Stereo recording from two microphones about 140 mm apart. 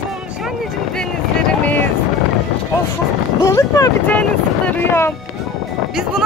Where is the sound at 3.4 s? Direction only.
25° left (ahead or behind).